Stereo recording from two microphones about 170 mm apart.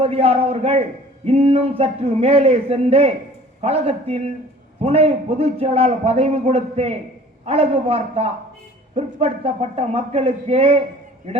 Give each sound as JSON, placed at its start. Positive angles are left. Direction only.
{"t": 0.0, "sound": "a man's voice", "side_deg": -35}